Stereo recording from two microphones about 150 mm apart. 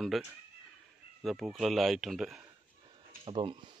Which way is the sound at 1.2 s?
Centre (ahead or behind).